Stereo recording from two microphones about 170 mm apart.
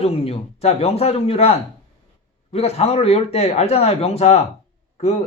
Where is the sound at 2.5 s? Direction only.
40° left (ahead or behind).